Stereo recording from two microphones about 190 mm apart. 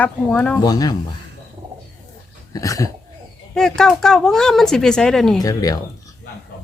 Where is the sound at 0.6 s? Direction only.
20° left (ahead or behind).